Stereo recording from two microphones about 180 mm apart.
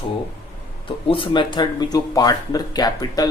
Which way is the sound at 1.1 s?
30° left (ahead or behind).